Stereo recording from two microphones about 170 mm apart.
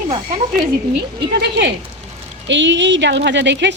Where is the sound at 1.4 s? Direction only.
85° right.